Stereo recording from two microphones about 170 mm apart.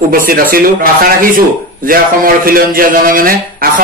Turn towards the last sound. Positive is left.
turn(degrees=-60)  # may be behind; listen again after turning